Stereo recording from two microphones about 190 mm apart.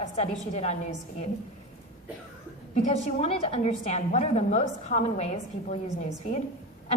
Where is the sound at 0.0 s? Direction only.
35° left (ahead or behind).